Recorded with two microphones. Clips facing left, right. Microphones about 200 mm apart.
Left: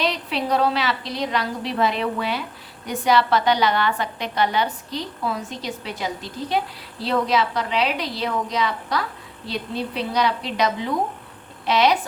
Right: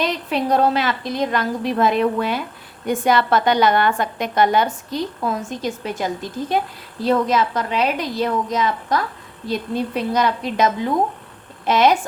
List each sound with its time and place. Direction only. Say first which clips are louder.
0.0 s a woman's voice: right 3 dB; 50° right (ahead or behind)